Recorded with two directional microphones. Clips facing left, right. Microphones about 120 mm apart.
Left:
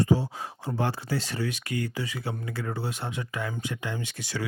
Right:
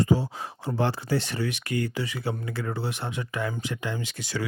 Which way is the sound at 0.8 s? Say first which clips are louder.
Right 3 dB; 30° right (ahead or behind).